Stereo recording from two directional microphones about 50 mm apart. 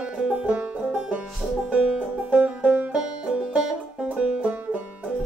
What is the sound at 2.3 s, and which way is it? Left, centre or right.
Music, right.